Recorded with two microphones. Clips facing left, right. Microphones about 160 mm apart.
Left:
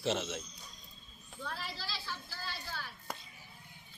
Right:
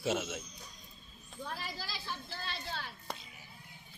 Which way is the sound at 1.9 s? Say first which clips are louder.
Right 1 dB; 20° right (ahead or behind).